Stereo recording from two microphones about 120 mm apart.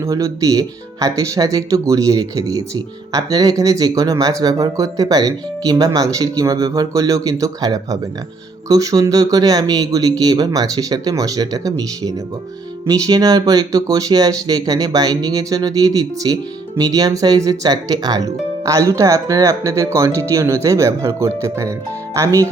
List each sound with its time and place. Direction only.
0.0 s speech: 25° right (ahead or behind)